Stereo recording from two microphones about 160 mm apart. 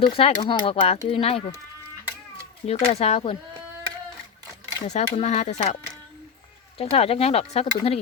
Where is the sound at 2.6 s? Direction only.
40° left (ahead or behind).